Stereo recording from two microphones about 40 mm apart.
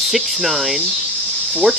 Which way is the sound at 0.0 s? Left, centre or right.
Centre.